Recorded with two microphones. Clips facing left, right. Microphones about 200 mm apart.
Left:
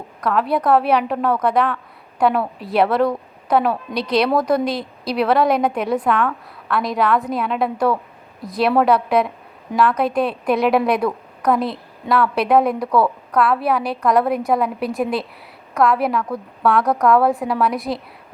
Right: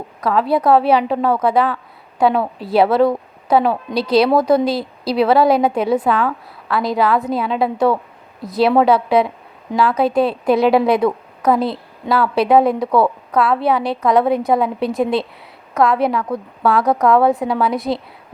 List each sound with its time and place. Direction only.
0.2 s a woman's voice: 5° right (ahead or behind)
3.9 s speech: 30° right (ahead or behind)
4.2 s a woman's voice: 5° right (ahead or behind)